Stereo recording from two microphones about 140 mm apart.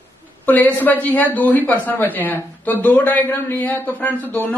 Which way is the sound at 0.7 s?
15° left (ahead or behind).